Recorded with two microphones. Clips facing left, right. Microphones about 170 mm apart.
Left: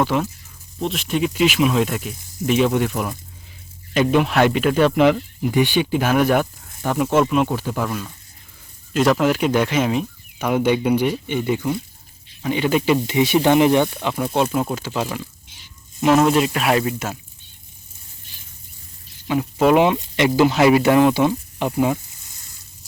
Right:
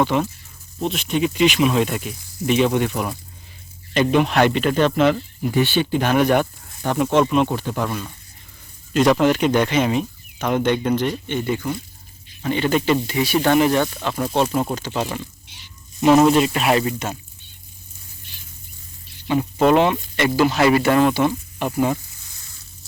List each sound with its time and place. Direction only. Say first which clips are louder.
0.0 s speech: right 1 dB; 5° left (ahead or behind)
13.1 s speech: left 2 dB; 20° left (ahead or behind)
14.2 s speech: even; 5° left (ahead or behind)
15.4 s a sound: right 2 dB; 45° left (ahead or behind)
16.0 s speech: right 2 dB; centre (ahead or behind)
19.3 s speech: even; 5° left (ahead or behind)